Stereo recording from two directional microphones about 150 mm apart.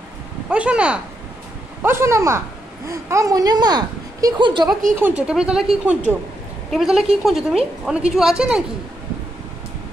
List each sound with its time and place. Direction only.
0.5 s a woman's voice: 5° right (ahead or behind); by 4.7 s 30° right (ahead or behind)
4.9 s a woman's voice: 10° right (ahead or behind)